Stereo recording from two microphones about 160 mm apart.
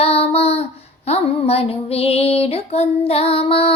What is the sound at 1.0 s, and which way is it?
Music, 40° left (ahead or behind).